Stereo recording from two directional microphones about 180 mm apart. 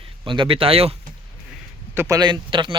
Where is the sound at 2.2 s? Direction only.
25° right (ahead or behind).